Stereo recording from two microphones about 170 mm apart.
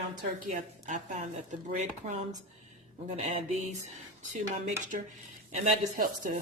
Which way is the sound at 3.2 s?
45° right (ahead or behind).